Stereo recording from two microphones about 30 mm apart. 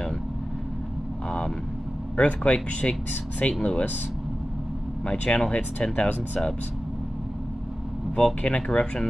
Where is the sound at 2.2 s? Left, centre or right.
Left.